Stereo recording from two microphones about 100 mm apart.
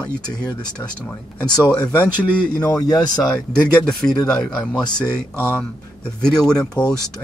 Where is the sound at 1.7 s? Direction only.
10° left (ahead or behind).